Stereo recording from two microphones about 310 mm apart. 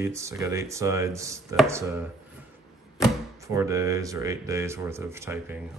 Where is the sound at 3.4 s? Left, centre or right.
Centre.